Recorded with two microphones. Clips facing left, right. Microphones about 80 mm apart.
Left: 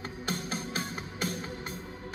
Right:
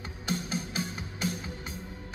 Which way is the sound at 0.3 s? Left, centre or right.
Left.